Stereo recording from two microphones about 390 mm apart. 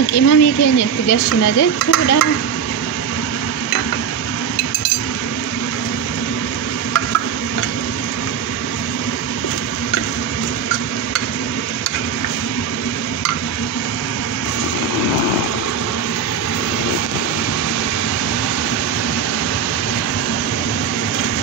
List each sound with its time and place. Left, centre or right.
0.1 s speech: left